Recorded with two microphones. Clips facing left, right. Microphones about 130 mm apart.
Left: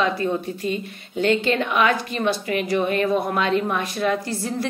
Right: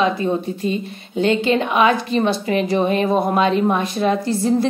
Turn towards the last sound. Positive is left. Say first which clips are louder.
# right 8 dB
turn(degrees=-25)  # may be behind; listen again after turning